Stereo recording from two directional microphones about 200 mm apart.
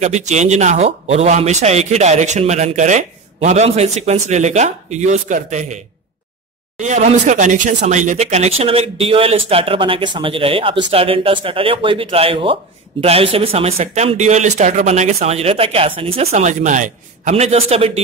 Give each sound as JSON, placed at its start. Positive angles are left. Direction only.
{"t": 0.0, "sound": "speech", "side_deg": -35}
{"t": 6.8, "sound": "speech", "side_deg": -35}